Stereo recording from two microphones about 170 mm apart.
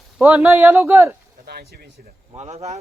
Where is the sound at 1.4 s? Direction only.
70° right (ahead or behind).